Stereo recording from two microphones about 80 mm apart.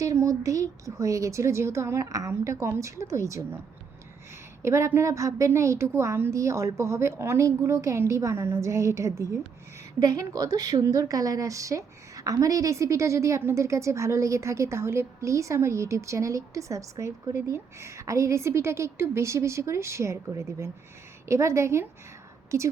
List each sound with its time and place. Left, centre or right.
0.0 s a woman's voice: right
4.6 s a woman's voice: right